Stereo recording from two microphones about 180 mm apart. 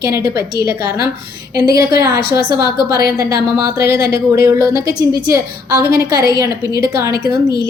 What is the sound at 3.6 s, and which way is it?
A woman's voice, 15° right (ahead or behind).